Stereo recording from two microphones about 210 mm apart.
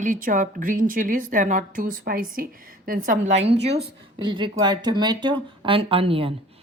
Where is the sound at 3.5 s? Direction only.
55° right (ahead or behind).